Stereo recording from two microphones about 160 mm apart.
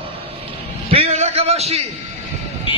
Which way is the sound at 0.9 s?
40° right (ahead or behind).